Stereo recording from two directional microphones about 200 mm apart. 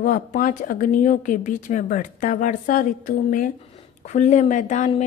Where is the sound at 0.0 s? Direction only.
40° left (ahead or behind).